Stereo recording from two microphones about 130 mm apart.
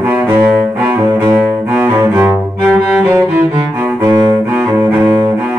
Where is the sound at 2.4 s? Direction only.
5° right (ahead or behind).